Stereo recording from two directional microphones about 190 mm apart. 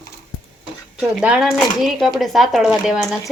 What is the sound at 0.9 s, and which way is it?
Speech, 5° right (ahead or behind).